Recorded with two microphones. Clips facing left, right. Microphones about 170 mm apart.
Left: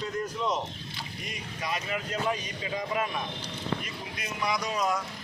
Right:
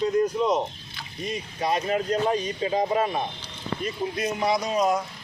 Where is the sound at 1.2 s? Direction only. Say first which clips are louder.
Right 9 dB; 30° right (ahead or behind).